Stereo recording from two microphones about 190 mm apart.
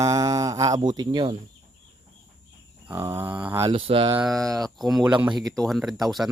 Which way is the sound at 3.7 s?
30° right (ahead or behind).